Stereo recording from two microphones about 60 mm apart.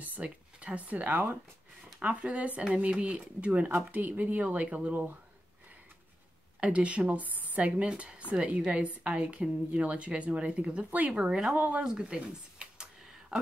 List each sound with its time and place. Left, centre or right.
0.0 s a woman's voice: right
6.6 s a woman's voice: right
11.1 s speech: centre
11.5 s a woman's voice: right
11.8 s speech: centre